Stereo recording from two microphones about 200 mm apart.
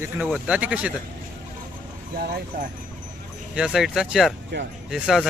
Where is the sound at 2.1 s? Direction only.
45° right (ahead or behind).